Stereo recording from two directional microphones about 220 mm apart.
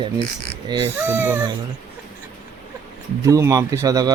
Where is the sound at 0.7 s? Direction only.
20° right (ahead or behind).